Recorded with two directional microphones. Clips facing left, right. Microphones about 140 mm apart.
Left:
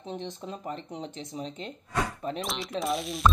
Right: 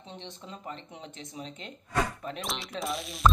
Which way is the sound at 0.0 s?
40° left (ahead or behind).